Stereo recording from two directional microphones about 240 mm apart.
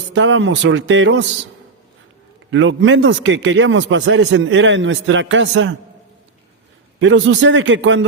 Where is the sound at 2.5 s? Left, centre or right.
Right.